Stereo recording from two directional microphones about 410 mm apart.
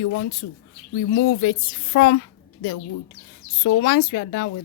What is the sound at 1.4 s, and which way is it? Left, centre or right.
Speech, left.